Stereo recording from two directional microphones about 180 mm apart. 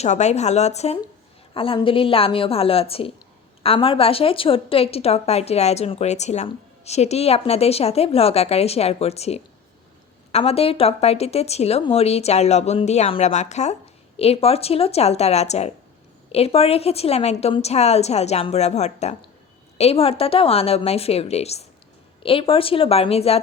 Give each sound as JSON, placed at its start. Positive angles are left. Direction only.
{"t": 0.0, "sound": "a woman's voice", "side_deg": 40}